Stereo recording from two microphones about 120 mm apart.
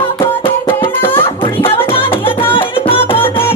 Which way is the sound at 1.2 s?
45° left (ahead or behind).